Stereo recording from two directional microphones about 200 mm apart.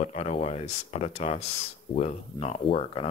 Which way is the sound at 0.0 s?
30° left (ahead or behind).